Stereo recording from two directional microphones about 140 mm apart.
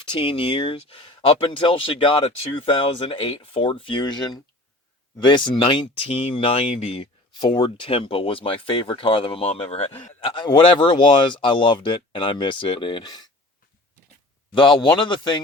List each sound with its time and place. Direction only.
0.1 s speech: 40° left (ahead or behind)
10.3 s speech: 35° left (ahead or behind)
14.5 s speech: 35° left (ahead or behind)